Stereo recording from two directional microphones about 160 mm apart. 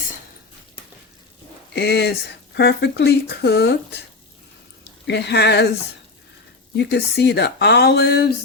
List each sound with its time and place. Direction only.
1.7 s speech: 90° left
4.8 s speech: 90° left
6.7 s speech: 90° left